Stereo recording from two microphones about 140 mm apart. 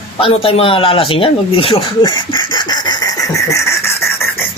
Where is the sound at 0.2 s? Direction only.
40° left (ahead or behind); by 4.3 s 20° left (ahead or behind).